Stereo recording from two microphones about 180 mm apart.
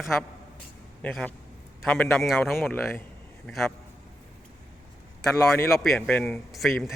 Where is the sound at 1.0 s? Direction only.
5° left (ahead or behind).